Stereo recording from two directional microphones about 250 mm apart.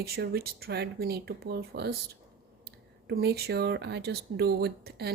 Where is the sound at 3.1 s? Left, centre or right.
Right.